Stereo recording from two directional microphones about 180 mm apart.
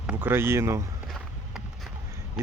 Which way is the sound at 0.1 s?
10° right (ahead or behind).